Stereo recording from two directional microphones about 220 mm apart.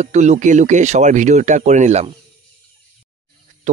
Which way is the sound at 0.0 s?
30° right (ahead or behind).